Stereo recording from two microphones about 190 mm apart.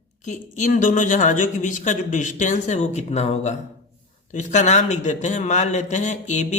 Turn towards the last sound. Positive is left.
turn(degrees=40)  # may be behind; listen again after turning